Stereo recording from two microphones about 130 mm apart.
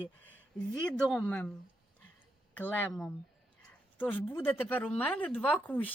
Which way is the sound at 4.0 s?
15° left (ahead or behind).